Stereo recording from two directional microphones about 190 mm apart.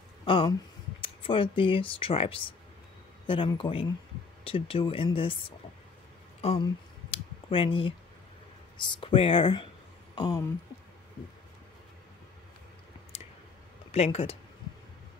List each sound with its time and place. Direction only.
0.2 s speech: 25° left (ahead or behind)
6.5 s a sound: 25° left (ahead or behind)
8.7 s speech: 25° left (ahead or behind)
13.1 s clicking: 30° left (ahead or behind)
13.9 s speech: 30° left (ahead or behind)